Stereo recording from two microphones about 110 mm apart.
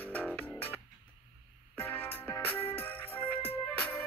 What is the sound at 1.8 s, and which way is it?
Music, 15° left (ahead or behind).